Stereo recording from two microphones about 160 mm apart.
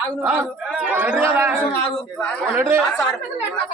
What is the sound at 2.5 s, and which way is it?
Speech, 15° right (ahead or behind).